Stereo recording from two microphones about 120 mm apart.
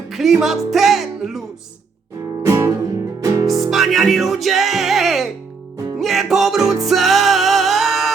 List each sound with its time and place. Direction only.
0.1 s music: centre (ahead or behind)
2.4 s music: 25° right (ahead or behind)
3.4 s music: centre (ahead or behind)